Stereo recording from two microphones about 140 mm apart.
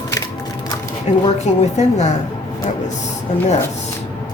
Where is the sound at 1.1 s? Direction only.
55° left (ahead or behind).